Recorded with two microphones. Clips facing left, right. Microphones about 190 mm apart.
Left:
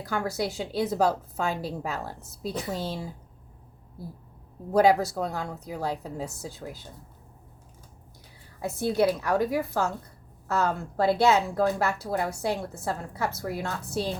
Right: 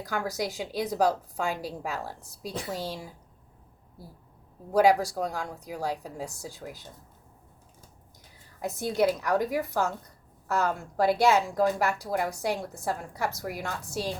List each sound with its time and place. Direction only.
0.0 s a woman's voice: 15° right (ahead or behind)
4.8 s a woman's voice: 10° right (ahead or behind)
8.6 s a woman's voice: 15° right (ahead or behind)